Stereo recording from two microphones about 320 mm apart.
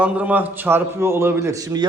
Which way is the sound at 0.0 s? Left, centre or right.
Centre.